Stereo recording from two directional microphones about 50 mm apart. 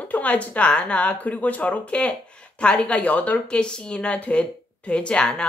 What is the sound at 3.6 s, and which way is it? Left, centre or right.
A woman's voice, centre.